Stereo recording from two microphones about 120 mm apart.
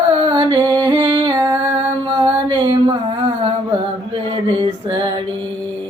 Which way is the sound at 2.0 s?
40° right (ahead or behind).